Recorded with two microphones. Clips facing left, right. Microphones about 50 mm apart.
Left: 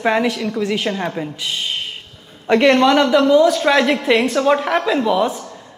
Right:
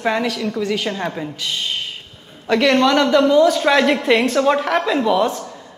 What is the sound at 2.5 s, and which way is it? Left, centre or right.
Speech, centre.